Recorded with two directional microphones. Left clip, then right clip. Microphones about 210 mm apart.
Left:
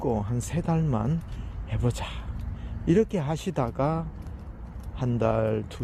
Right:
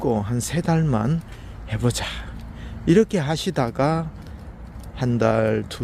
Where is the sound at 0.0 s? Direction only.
20° right (ahead or behind).